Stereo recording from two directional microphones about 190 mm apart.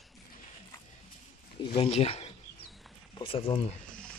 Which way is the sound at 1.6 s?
30° left (ahead or behind).